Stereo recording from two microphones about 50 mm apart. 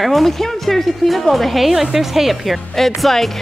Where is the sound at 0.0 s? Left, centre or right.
Centre.